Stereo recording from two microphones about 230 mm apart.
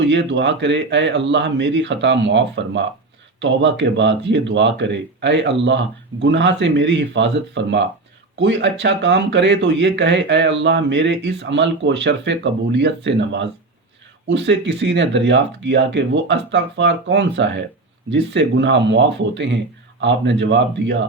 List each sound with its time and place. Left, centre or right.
0.0 s speech: right